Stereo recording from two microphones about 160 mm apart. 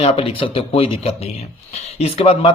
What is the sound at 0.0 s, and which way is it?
A man's voice, 35° left (ahead or behind).